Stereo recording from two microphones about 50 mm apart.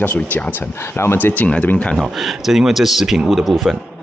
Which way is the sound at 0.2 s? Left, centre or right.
Left.